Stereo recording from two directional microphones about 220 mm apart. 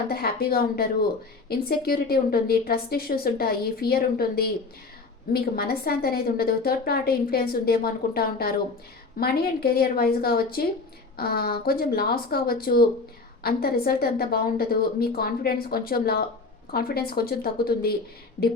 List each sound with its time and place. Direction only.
0.1 s a woman's voice: 45° left (ahead or behind)